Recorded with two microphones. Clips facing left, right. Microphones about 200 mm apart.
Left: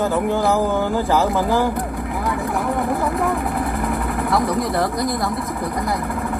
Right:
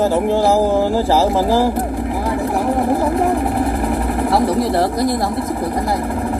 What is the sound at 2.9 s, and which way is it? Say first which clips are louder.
Vehicle: right 5 dB; 45° right (ahead or behind).